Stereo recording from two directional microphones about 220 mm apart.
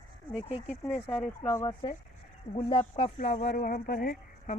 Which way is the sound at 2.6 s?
25° left (ahead or behind).